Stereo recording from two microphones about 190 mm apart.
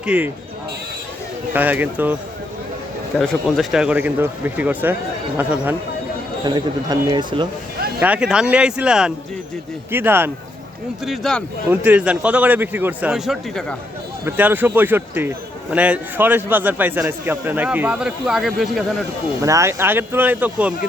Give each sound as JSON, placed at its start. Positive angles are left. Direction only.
{"t": 0.0, "sound": "speech", "side_deg": -5}
{"t": 1.5, "sound": "a man's voice", "side_deg": -10}
{"t": 3.2, "sound": "a man's voice", "side_deg": 0}
{"t": 6.4, "sound": "a man's voice", "side_deg": -25}
{"t": 8.0, "sound": "a man's voice", "side_deg": -5}
{"t": 11.0, "sound": "speech", "side_deg": 0}
{"t": 11.7, "sound": "a man's voice", "side_deg": -10}
{"t": 14.3, "sound": "a man's voice", "side_deg": -10}
{"t": 19.4, "sound": "a man's voice", "side_deg": -15}